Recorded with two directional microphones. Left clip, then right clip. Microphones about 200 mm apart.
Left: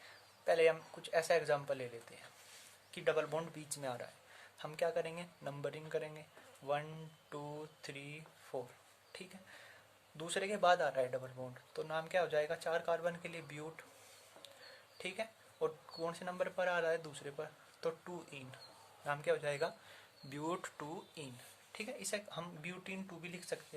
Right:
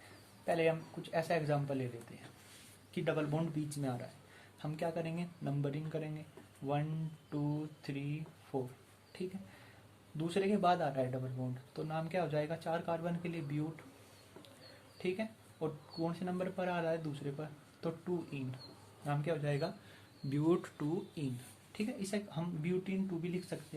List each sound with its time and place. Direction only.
0.4 s speech: 50° left (ahead or behind)
2.9 s speech: 45° left (ahead or behind)
7.8 s speech: 50° left (ahead or behind)
14.9 s speech: 45° left (ahead or behind)
20.3 s speech: 25° left (ahead or behind)
21.7 s speech: 40° left (ahead or behind)